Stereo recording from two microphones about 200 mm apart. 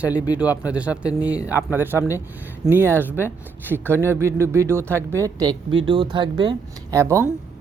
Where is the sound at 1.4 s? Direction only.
15° left (ahead or behind).